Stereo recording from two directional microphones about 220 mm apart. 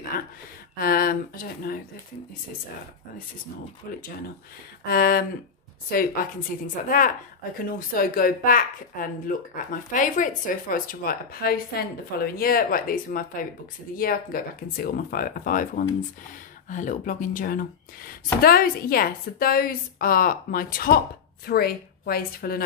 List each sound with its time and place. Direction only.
0.1 s a sound: 45° left (ahead or behind)
0.7 s speech: 40° left (ahead or behind)
4.8 s speech: 45° left (ahead or behind)